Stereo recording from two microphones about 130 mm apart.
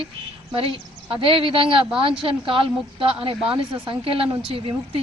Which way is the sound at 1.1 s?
40° right (ahead or behind).